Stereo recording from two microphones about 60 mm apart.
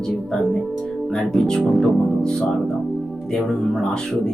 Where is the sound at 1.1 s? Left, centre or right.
Centre.